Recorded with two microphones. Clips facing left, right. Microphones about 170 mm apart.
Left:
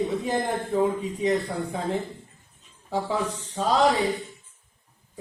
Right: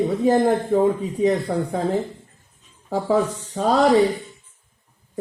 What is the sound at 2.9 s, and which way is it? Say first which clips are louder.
Speech: right 7 dB; 45° right (ahead or behind).